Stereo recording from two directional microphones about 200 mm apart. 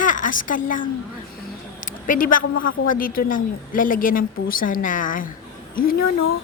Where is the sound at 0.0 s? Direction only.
40° left (ahead or behind).